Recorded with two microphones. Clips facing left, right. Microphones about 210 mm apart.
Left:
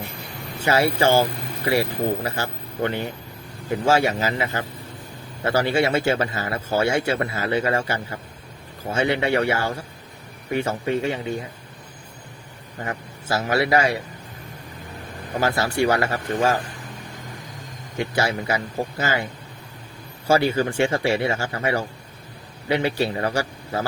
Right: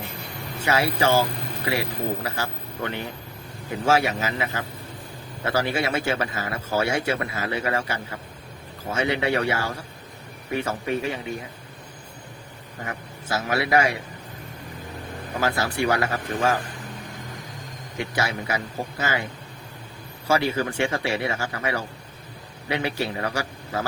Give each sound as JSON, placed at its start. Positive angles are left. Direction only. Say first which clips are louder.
{"t": 0.6, "sound": "speech", "louder": "left 3 dB", "side_deg": 30}
{"t": 12.8, "sound": "a man's voice", "louder": "left 4 dB", "side_deg": 30}
{"t": 15.4, "sound": "speech", "louder": "left 3 dB", "side_deg": 30}
{"t": 18.1, "sound": "speech", "louder": "left 3 dB", "side_deg": 30}
{"t": 20.2, "sound": "a man's voice", "louder": "left 4 dB", "side_deg": 30}